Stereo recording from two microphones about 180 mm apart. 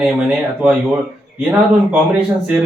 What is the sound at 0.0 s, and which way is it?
Speech, 5° right (ahead or behind).